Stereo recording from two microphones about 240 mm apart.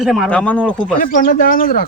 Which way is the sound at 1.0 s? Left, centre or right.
Left.